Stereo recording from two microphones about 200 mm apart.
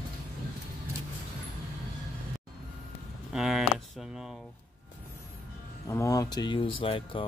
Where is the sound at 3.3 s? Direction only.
Centre (ahead or behind).